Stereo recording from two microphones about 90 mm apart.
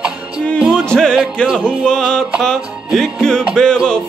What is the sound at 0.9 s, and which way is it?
Music, 10° left (ahead or behind).